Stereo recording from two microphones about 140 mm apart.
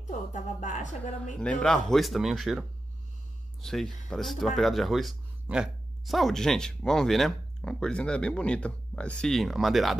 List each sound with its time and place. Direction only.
0.3 s speech: 65° left (ahead or behind)
1.4 s speech: 5° left (ahead or behind)
3.6 s speech: 5° left (ahead or behind)